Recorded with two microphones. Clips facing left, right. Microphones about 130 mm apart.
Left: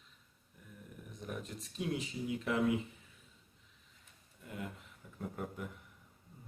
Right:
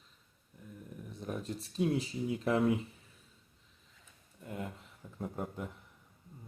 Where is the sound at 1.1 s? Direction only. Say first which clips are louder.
Right 4 dB; 35° right (ahead or behind).